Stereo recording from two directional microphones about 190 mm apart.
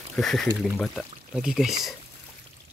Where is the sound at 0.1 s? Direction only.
Centre (ahead or behind).